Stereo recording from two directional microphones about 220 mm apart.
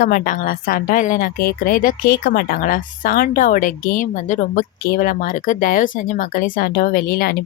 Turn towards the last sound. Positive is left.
turn(degrees=40)  # may be behind; listen again after turning